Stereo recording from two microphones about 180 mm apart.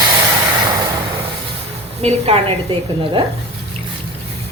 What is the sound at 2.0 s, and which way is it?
A woman's voice, 35° right (ahead or behind).